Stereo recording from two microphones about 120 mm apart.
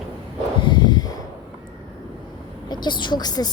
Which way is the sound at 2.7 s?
40° left (ahead or behind).